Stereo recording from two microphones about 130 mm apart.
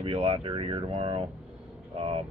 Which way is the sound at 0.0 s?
50° right (ahead or behind).